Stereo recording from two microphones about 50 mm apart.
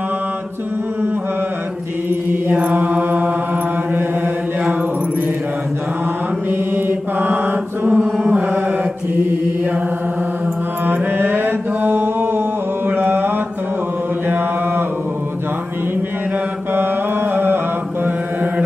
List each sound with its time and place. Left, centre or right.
2.7 s mantra: right
6.7 s mantra: right
10.9 s mantra: right